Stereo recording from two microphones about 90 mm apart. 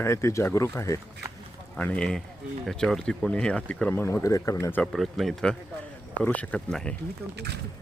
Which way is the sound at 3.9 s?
25° left (ahead or behind).